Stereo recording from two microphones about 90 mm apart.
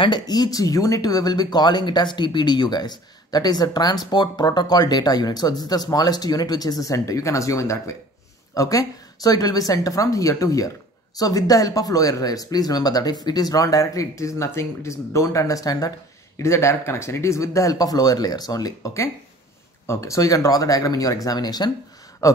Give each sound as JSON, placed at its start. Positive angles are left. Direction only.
{"t": 0.3, "sound": "speech", "side_deg": 45}
{"t": 16.3, "sound": "speech", "side_deg": 30}
{"t": 19.9, "sound": "speech", "side_deg": 35}
{"t": 22.2, "sound": "speech", "side_deg": 40}